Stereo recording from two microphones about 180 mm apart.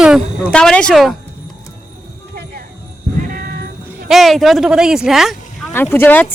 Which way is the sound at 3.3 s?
55° right (ahead or behind).